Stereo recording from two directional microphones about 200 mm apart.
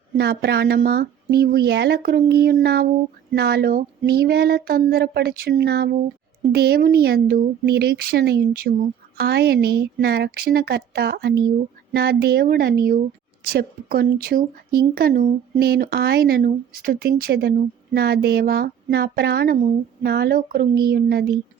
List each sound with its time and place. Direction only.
0.2 s speech: 55° right (ahead or behind)